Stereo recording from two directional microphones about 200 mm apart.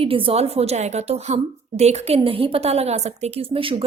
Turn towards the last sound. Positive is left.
turn(degrees=-25)  # may be behind; listen again after turning